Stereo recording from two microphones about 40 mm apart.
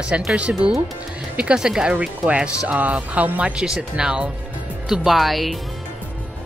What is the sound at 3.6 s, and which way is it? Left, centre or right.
Speech, centre.